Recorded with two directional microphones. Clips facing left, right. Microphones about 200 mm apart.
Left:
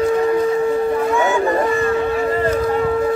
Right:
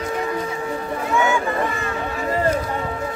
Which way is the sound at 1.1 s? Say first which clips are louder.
Left 4 dB; 35° left (ahead or behind).